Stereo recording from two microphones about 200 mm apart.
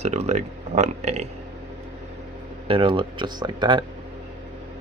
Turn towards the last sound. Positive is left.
turn(degrees=-25)  # may be behind; listen again after turning